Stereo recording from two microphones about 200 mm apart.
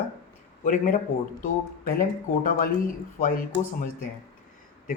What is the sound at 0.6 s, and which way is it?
Speech, 40° left (ahead or behind).